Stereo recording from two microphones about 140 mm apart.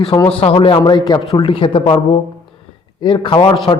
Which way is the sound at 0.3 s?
40° left (ahead or behind).